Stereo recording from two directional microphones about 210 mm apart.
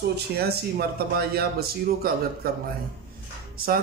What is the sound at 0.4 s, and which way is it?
Speech, 50° right (ahead or behind).